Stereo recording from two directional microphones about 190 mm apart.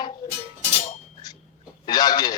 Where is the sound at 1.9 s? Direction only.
20° left (ahead or behind).